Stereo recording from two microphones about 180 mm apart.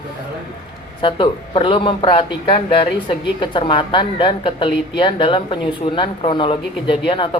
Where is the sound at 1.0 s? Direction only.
30° left (ahead or behind).